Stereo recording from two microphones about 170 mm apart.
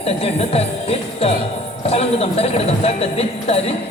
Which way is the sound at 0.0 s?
35° left (ahead or behind).